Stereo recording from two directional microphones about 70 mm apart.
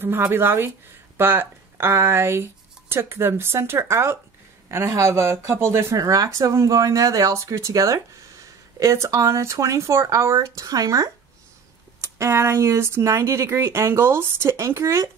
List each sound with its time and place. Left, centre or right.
0.0 s speech: right
5.9 s speech: right
12.0 s speech: right